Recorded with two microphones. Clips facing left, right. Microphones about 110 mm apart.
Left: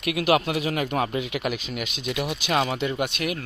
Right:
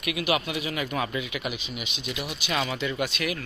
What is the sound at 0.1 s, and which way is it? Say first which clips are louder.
Speech: left 5 dB; 50° left (ahead or behind).